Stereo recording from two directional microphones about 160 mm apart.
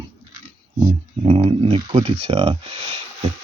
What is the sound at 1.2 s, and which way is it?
Speech, 35° right (ahead or behind).